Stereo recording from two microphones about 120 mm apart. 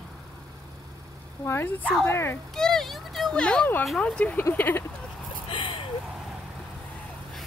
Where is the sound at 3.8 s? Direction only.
10° left (ahead or behind).